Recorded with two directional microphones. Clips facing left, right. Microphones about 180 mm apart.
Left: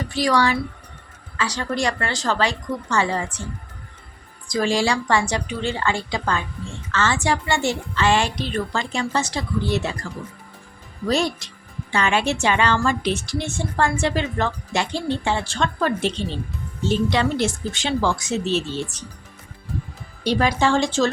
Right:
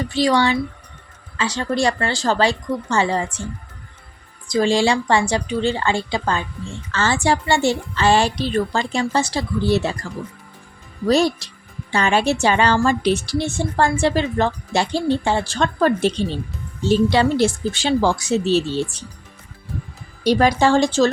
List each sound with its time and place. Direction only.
0.0 s speech: 25° right (ahead or behind)
4.4 s a woman's voice: 25° right (ahead or behind)
11.0 s a woman's voice: 35° right (ahead or behind)
20.2 s a woman's voice: 40° right (ahead or behind)